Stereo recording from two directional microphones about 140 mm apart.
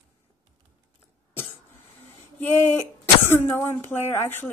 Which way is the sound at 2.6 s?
15° left (ahead or behind).